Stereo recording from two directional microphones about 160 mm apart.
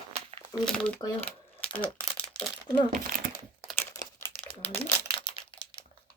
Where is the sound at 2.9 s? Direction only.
60° right (ahead or behind).